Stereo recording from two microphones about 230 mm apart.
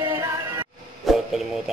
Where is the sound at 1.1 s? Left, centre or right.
Centre.